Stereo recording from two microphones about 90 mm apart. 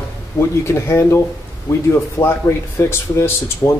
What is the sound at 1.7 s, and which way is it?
A man's voice, 40° left (ahead or behind).